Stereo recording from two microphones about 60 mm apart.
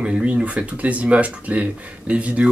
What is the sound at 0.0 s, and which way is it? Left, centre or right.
Speech, centre.